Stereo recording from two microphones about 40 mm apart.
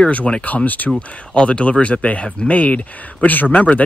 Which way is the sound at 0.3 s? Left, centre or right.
Left.